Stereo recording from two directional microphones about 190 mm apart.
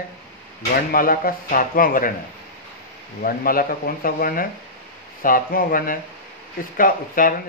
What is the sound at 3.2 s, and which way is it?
Speech, 50° left (ahead or behind).